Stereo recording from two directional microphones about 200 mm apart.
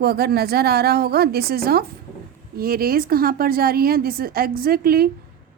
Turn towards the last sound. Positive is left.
turn(degrees=-50)  # may be behind; listen again after turning